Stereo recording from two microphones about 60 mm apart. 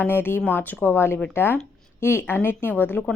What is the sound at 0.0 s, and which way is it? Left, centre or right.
A woman's voice, left.